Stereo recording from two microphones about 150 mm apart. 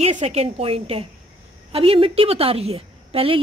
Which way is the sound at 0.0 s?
45° right (ahead or behind).